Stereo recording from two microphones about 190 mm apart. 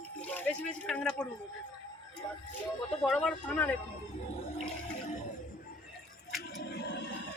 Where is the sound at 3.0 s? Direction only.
5° left (ahead or behind).